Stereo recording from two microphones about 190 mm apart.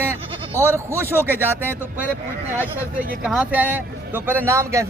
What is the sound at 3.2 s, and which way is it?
Speech, 5° right (ahead or behind).